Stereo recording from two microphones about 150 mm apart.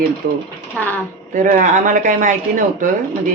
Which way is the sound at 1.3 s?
65° right (ahead or behind).